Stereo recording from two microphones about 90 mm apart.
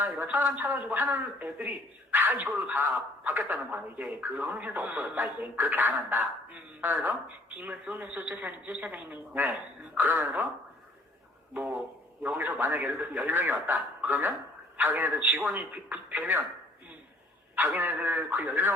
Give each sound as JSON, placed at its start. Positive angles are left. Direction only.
{"t": 0.0, "sound": "a man's voice", "side_deg": -25}
{"t": 12.2, "sound": "a man's voice", "side_deg": -20}
{"t": 17.5, "sound": "a man's voice", "side_deg": -20}